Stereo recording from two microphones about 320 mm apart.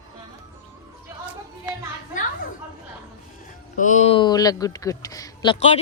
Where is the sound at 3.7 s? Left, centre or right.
Left.